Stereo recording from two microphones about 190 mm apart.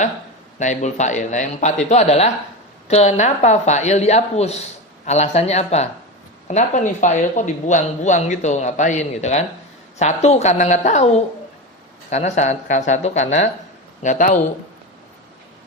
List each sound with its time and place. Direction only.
0.6 s speech: 40° left (ahead or behind)
12.1 s speech: 35° left (ahead or behind)